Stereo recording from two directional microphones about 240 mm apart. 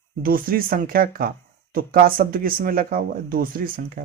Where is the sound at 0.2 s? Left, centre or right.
Right.